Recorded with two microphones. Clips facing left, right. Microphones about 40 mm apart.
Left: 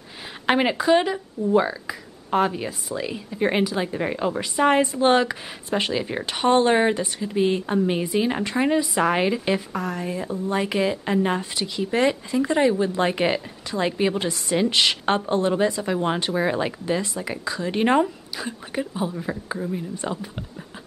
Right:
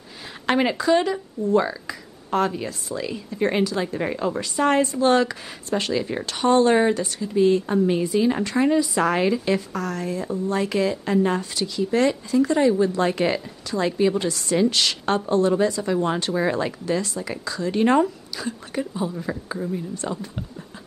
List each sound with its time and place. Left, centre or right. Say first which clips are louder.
0.5 s speech: left 1 dB; centre